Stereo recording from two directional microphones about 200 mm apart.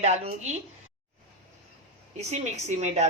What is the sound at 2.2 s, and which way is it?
Speech, 35° right (ahead or behind).